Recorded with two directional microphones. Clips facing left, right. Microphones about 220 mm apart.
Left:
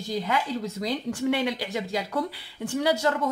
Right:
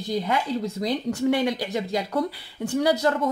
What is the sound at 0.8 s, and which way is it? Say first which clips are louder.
Speech: right 3 dB; 35° right (ahead or behind).